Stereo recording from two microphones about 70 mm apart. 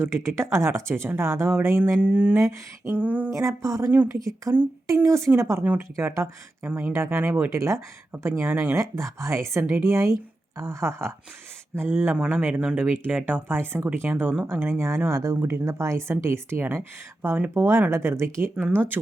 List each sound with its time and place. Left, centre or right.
0.0 s speech: right
2.0 s speech: right
2.3 s a woman's voice: right
2.9 s speech: right
3.3 s a woman's voice: right